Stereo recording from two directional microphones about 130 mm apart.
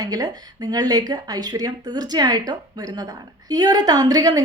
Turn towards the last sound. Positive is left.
turn(degrees=-30)  # may be behind; listen again after turning